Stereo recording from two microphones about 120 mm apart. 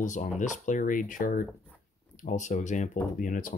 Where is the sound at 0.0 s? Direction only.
90° left.